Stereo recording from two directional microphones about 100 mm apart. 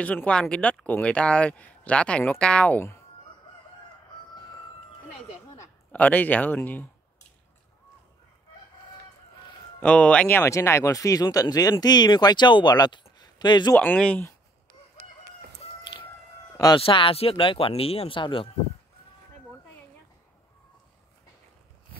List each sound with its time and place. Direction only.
0.0 s speech: 15° left (ahead or behind)
5.9 s speech: 15° left (ahead or behind)
9.8 s speech: 10° left (ahead or behind); by 13.7 s 50° left (ahead or behind)
13.7 s speech: 15° left (ahead or behind)
16.7 s speech: 60° left (ahead or behind)